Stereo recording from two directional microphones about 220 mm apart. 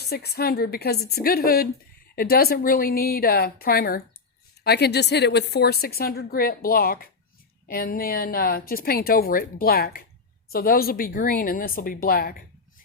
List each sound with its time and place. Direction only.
0.0 s a woman's voice: 45° left (ahead or behind)